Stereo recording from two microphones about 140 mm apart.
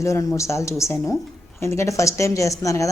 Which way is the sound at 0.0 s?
25° left (ahead or behind).